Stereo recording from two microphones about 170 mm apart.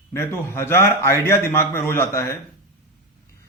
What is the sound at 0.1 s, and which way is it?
Speech, 15° left (ahead or behind).